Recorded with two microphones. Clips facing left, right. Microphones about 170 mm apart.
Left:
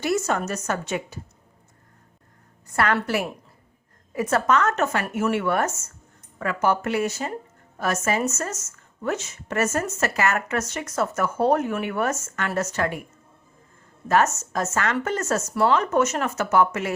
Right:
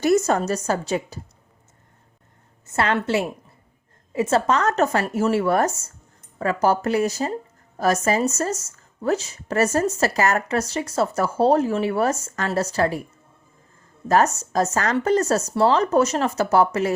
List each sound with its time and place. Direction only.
0.0 s speech: 40° right (ahead or behind)
2.6 s a woman's voice: 25° right (ahead or behind)
14.1 s speech: 35° right (ahead or behind)